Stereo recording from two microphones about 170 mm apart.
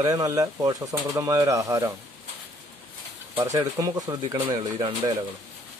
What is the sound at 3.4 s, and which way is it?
Speech, 20° right (ahead or behind).